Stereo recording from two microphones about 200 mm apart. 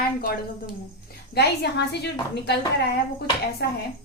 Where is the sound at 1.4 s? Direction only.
55° left (ahead or behind).